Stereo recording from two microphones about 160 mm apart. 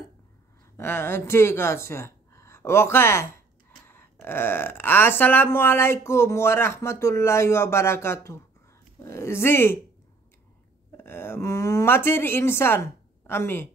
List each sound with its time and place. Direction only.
0.7 s speech: 15° left (ahead or behind)
11.1 s speech: 15° left (ahead or behind)